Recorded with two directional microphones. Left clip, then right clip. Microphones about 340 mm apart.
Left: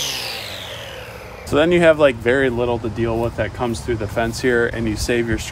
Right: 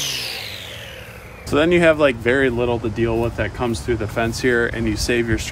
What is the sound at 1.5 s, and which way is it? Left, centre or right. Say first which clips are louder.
Speech: left 1 dB; centre.